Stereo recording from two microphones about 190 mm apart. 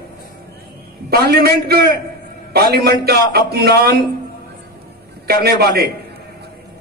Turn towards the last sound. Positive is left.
turn(degrees=-55)  # may be behind; listen again after turning